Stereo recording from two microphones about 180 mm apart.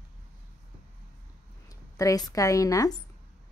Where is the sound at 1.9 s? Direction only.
20° left (ahead or behind).